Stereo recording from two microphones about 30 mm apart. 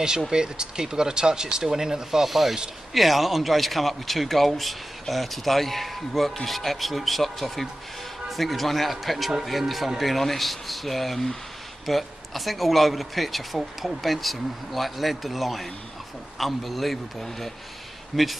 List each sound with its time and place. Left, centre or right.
0.3 s speech: right
2.2 s speech: centre